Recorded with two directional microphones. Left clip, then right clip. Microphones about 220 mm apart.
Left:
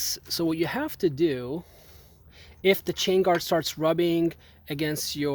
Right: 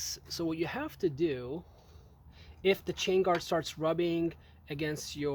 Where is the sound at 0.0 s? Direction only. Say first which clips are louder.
Left 8 dB; 45° left (ahead or behind).